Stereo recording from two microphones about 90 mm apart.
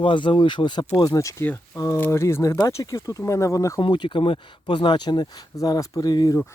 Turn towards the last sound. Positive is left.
turn(degrees=50)  # may be behind; listen again after turning